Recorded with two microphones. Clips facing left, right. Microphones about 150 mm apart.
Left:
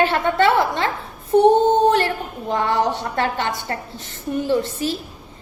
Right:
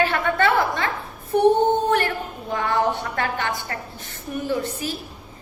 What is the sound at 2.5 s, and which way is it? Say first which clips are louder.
A woman's voice: left 2 dB; 25° left (ahead or behind).